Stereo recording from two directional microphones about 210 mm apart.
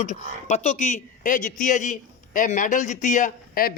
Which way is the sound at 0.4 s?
30° left (ahead or behind).